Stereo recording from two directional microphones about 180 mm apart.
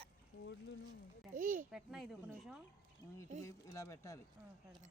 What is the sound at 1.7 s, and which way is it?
Speech, centre (ahead or behind).